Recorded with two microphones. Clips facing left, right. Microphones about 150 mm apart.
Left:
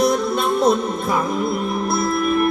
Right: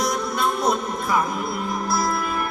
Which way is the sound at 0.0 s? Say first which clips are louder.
Left 5 dB; 25° left (ahead or behind).